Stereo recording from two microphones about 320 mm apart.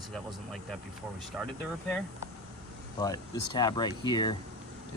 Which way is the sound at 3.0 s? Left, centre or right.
Centre.